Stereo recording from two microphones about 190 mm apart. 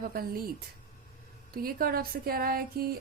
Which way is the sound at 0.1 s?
50° right (ahead or behind).